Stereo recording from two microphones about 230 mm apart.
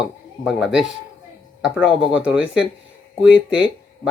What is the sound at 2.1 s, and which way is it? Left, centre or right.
Speech, centre.